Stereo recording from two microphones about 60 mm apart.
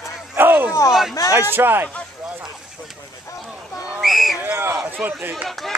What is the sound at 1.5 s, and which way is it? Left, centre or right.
Speech, right.